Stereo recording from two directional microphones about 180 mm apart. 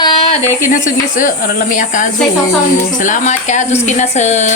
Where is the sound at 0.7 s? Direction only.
45° left (ahead or behind).